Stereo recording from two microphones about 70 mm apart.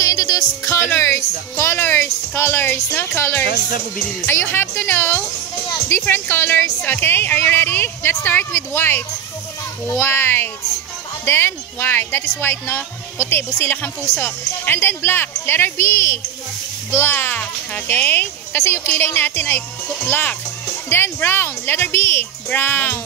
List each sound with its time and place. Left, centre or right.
0.0 s music: left
0.7 s music: left
3.2 s speech: left